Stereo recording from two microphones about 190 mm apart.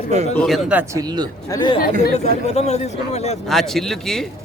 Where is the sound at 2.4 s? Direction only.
35° left (ahead or behind).